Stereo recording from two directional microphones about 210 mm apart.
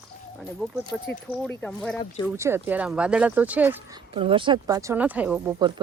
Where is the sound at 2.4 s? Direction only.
10° right (ahead or behind).